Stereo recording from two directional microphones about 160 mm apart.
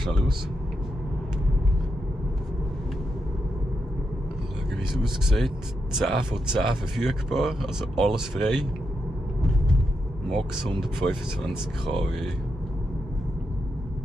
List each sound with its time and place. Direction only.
5.0 s speech: centre (ahead or behind)
10.8 s speech: centre (ahead or behind)